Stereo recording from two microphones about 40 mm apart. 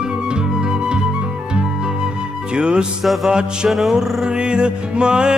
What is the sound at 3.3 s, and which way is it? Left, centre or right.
Music, right.